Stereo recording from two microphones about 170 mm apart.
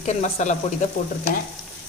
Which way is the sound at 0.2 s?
45° left (ahead or behind).